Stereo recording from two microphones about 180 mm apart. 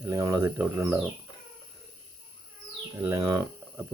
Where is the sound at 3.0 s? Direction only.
15° right (ahead or behind).